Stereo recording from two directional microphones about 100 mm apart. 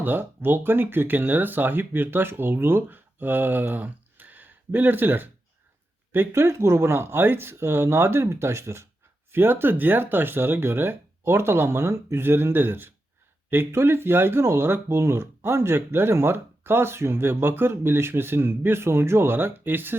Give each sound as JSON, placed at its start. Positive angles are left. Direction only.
{"t": 0.0, "sound": "speech", "side_deg": -20}